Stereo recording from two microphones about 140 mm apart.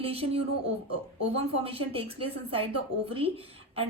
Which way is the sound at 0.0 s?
45° right (ahead or behind).